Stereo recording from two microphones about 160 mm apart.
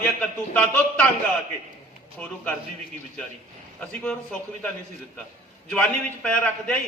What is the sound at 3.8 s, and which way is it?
A man's voice, 5° left (ahead or behind).